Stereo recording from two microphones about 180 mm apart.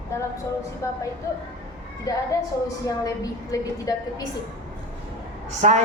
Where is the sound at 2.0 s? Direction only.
20° left (ahead or behind).